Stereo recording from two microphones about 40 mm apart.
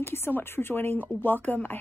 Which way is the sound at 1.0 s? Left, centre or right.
Left.